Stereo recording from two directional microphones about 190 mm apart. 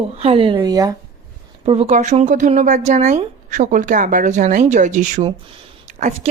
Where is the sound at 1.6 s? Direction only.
30° right (ahead or behind).